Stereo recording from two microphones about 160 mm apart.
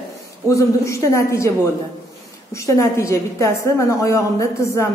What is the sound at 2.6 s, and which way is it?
A woman's voice, 20° left (ahead or behind).